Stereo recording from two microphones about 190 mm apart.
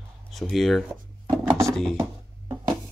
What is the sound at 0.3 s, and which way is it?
Speech, centre (ahead or behind).